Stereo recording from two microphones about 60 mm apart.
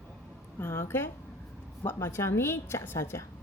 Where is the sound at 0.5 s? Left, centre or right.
Left.